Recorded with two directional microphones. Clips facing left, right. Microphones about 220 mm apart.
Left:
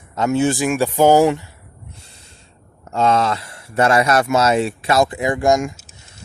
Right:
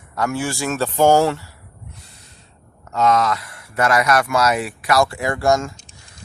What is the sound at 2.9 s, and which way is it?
Speech, 30° left (ahead or behind).